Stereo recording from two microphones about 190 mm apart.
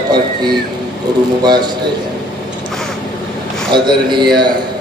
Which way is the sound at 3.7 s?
25° right (ahead or behind).